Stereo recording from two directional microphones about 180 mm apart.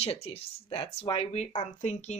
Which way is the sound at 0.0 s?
30° left (ahead or behind).